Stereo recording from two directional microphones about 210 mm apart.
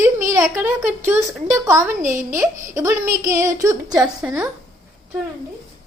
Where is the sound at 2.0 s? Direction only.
35° right (ahead or behind).